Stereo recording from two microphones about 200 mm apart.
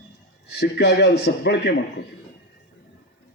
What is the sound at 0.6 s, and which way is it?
A man's voice, 60° left (ahead or behind).